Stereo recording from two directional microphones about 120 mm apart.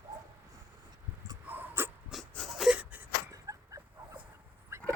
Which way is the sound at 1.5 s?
15° right (ahead or behind).